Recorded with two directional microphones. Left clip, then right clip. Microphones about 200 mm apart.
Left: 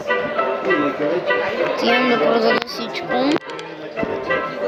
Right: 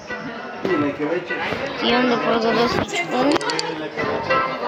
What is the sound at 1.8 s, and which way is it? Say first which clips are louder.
Speech: left 1 dB; 45° left (ahead or behind).